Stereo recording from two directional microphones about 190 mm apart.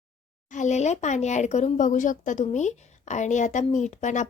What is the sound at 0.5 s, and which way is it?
Speech, 40° left (ahead or behind).